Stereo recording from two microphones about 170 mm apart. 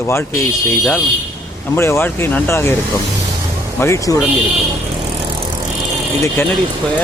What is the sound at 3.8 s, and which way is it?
Speech, 15° left (ahead or behind).